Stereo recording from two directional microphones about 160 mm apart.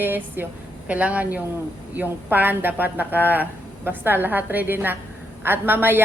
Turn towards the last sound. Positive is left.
turn(degrees=-10)  # may be behind; listen again after turning